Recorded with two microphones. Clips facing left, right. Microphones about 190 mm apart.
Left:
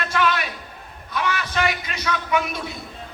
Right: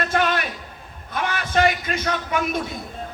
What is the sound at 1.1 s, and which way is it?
A man's voice, 50° right (ahead or behind).